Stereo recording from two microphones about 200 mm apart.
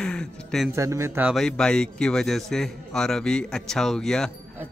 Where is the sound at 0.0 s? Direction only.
5° left (ahead or behind).